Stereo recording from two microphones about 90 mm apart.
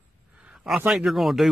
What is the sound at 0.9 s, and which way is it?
Speech, centre (ahead or behind).